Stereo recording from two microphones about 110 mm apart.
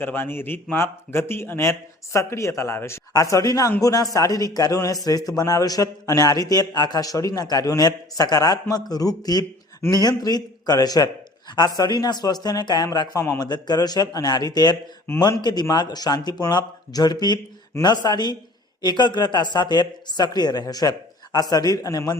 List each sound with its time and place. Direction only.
0.0 s a man's voice: 20° left (ahead or behind)
13.4 s a man's voice: 40° left (ahead or behind)